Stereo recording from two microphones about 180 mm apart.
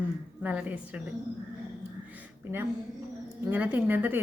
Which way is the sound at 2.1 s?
10° right (ahead or behind).